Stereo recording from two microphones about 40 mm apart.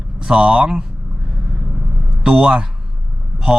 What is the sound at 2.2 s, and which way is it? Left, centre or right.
Speech, centre.